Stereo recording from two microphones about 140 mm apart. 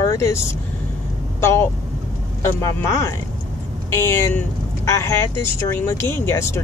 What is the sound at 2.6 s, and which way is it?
Speech, 20° left (ahead or behind).